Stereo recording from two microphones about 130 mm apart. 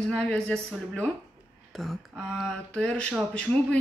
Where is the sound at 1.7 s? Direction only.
Centre (ahead or behind).